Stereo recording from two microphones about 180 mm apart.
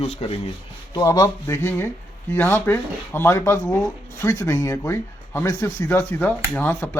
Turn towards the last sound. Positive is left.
turn(degrees=10)  # may be behind; listen again after turning